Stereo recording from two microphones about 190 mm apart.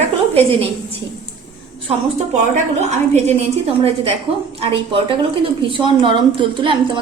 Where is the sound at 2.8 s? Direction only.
35° right (ahead or behind).